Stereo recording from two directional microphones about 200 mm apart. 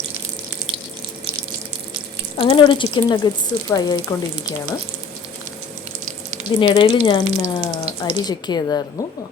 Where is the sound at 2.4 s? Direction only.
25° left (ahead or behind).